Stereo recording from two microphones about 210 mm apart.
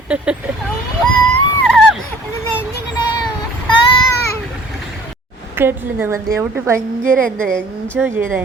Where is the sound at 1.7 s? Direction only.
Centre (ahead or behind).